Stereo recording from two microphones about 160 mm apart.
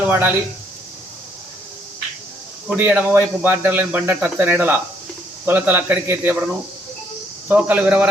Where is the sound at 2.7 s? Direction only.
10° right (ahead or behind).